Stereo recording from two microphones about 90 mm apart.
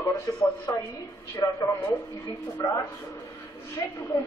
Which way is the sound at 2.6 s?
45° left (ahead or behind).